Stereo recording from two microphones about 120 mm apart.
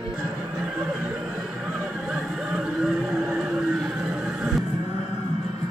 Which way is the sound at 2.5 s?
5° right (ahead or behind).